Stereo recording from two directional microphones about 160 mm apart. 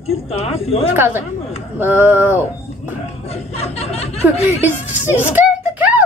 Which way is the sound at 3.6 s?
40° left (ahead or behind).